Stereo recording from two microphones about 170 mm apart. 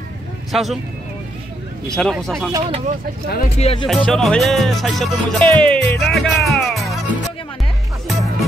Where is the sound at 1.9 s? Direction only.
Centre (ahead or behind).